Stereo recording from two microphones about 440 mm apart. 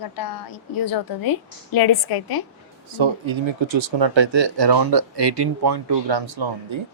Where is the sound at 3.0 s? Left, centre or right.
Right.